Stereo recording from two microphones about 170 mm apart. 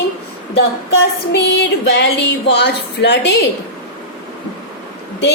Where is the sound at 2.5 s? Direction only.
75° left (ahead or behind).